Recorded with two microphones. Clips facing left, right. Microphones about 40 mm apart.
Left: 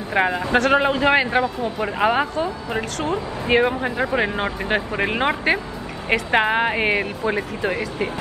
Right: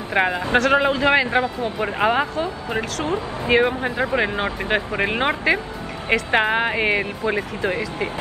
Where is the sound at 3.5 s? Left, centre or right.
Centre.